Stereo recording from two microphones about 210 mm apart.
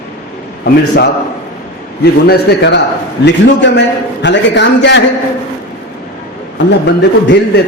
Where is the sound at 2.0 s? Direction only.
55° left (ahead or behind).